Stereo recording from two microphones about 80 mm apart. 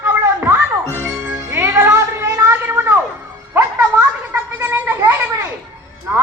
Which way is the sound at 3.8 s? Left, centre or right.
Centre.